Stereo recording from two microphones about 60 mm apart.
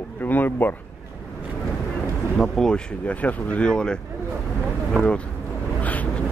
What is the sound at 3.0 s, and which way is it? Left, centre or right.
Speech, left.